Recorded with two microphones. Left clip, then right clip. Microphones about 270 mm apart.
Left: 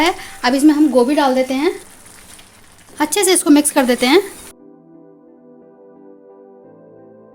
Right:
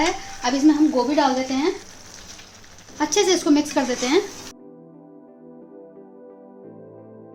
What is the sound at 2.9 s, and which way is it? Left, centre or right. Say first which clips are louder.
A woman's voice: left 4 dB; left.